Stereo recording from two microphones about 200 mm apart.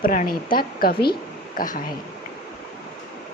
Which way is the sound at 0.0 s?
45° left (ahead or behind).